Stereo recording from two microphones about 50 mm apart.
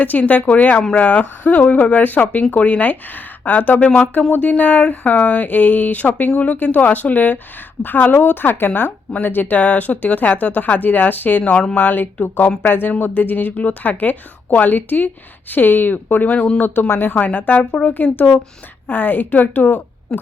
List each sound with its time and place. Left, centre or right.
0.0 s a woman's voice: left
11.4 s speech: centre
11.7 s a woman's voice: left
20.1 s speech: centre